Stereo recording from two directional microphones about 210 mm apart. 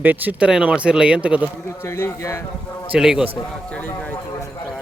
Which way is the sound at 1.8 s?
15° left (ahead or behind).